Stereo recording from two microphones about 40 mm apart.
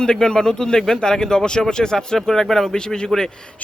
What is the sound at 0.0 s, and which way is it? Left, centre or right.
A man's voice, centre.